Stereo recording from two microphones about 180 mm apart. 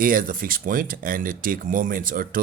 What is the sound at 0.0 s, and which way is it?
Speech, 50° right (ahead or behind).